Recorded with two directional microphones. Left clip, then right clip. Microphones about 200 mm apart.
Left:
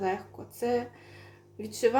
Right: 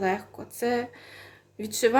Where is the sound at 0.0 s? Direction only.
30° right (ahead or behind).